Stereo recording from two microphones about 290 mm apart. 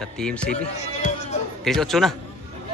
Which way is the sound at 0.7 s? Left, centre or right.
Left.